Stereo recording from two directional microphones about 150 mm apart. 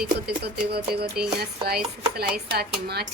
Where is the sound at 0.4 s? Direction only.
90° right.